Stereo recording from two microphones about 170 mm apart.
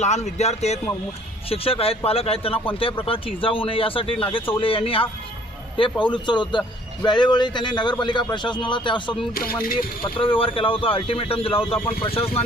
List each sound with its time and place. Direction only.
0.0 s a man's voice: 40° left (ahead or behind)
9.3 s a sound: 60° left (ahead or behind)
10.0 s speech: 30° left (ahead or behind)